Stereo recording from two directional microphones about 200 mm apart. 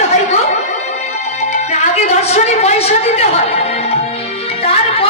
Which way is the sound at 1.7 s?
35° left (ahead or behind).